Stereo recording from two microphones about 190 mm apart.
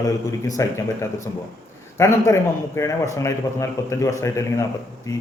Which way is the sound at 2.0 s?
15° left (ahead or behind).